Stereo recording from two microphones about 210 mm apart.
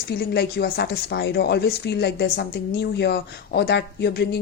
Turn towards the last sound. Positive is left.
turn(degrees=50)  # may be behind; listen again after turning